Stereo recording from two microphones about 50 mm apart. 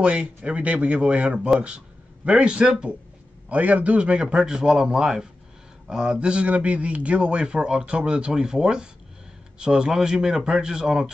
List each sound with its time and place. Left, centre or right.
0.0 s a man's voice: right